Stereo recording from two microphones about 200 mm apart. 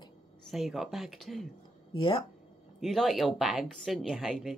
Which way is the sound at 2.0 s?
25° left (ahead or behind).